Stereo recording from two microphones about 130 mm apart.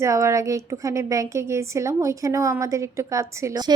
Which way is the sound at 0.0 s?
20° right (ahead or behind).